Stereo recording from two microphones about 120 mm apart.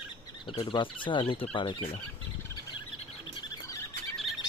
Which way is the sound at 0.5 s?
45° left (ahead or behind).